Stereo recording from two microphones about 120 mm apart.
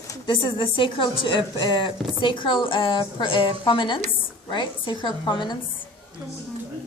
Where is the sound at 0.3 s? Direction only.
45° left (ahead or behind).